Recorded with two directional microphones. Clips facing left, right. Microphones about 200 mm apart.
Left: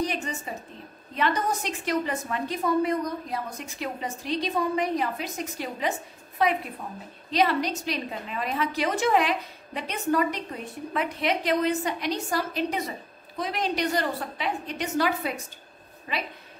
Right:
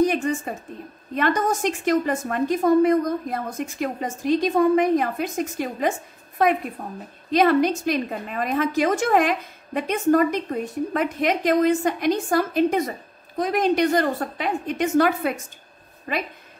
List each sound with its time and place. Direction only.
0.0 s a woman's voice: 50° right (ahead or behind)